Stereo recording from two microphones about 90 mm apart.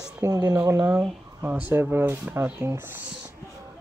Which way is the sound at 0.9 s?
20° right (ahead or behind).